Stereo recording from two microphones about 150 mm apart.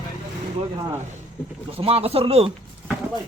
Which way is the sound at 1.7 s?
40° right (ahead or behind).